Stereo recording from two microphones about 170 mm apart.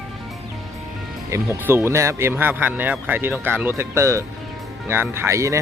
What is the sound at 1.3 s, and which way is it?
Speech, 15° right (ahead or behind).